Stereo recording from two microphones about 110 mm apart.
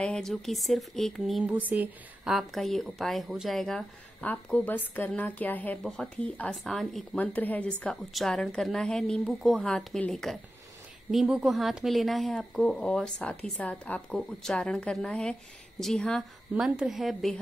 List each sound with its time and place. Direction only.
0.0 s speech: 5° left (ahead or behind)
1.7 s a woman's voice: 15° right (ahead or behind)
2.3 s a woman's voice: centre (ahead or behind)
7.2 s a woman's voice: 15° left (ahead or behind)
8.1 s a woman's voice: centre (ahead or behind)